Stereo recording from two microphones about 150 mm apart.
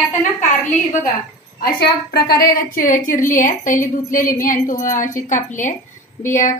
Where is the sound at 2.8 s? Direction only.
60° left (ahead or behind).